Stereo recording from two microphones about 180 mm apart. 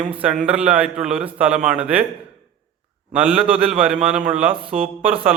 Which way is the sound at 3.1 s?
5° right (ahead or behind).